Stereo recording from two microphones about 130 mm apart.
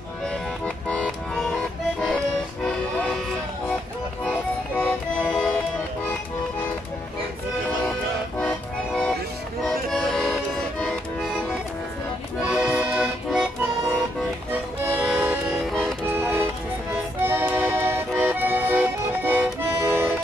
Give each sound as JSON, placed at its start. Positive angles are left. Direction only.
{"t": 0.3, "sound": "music", "side_deg": 5}
{"t": 4.2, "sound": "music", "side_deg": 15}
{"t": 5.3, "sound": "music", "side_deg": 0}
{"t": 8.4, "sound": "music", "side_deg": 5}
{"t": 12.4, "sound": "accordion", "side_deg": -5}
{"t": 15.0, "sound": "music", "side_deg": -10}
{"t": 15.7, "sound": "accordion", "side_deg": 0}
{"t": 16.1, "sound": "music", "side_deg": -20}
{"t": 18.2, "sound": "accordion", "side_deg": -15}